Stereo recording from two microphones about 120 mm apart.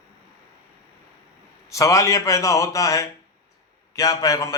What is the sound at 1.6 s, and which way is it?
A man's voice, 25° left (ahead or behind).